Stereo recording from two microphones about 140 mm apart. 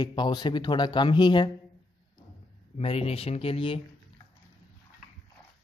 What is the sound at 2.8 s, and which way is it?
Speech, 45° left (ahead or behind).